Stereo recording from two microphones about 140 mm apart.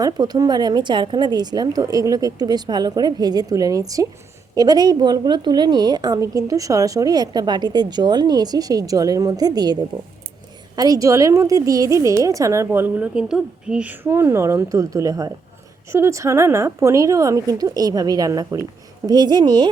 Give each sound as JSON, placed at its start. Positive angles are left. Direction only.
{"t": 0.0, "sound": "a woman's voice", "side_deg": -25}
{"t": 10.8, "sound": "a woman's voice", "side_deg": -25}